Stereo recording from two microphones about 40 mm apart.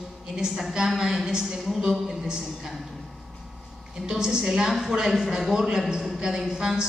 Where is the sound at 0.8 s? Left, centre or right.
Centre.